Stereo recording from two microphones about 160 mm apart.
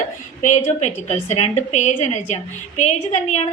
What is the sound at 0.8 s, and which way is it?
A woman's voice, 45° left (ahead or behind).